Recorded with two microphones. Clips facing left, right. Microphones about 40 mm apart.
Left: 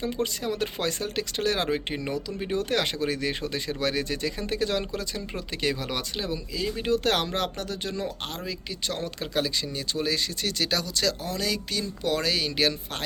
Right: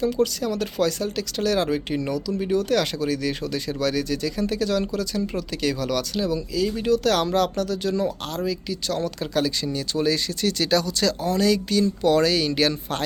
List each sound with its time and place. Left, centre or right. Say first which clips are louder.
0.0 s speech: right 6 dB; left
9.7 s speech: right 6 dB; centre